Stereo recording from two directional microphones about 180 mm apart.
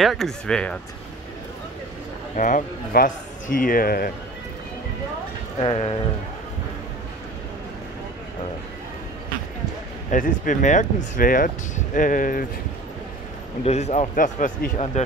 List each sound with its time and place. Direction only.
0.0 s speech: centre (ahead or behind)
2.3 s speech: 45° left (ahead or behind)
5.6 s speech: 30° left (ahead or behind)
10.1 s speech: 50° left (ahead or behind)
13.7 s speech: 40° left (ahead or behind)